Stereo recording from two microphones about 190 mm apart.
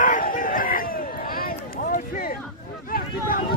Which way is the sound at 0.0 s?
45° left (ahead or behind).